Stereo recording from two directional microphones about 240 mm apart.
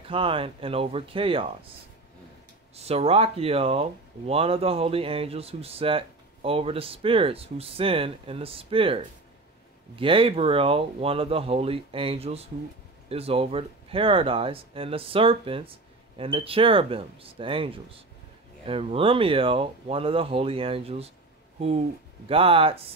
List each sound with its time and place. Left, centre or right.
0.1 s speech: right
2.7 s speech: right